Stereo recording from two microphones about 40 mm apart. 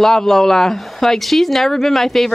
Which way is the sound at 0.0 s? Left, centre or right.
Centre.